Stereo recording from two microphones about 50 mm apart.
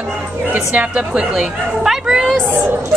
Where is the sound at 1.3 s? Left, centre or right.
Centre.